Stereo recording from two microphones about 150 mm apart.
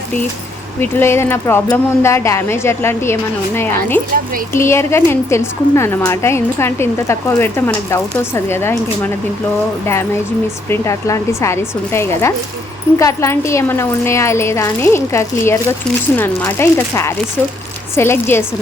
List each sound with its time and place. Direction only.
0.8 s a woman's voice: 15° left (ahead or behind)
9.8 s a woman's voice: 15° left (ahead or behind)